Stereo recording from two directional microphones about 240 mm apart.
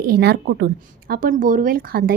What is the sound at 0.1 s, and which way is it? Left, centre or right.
A woman's voice, right.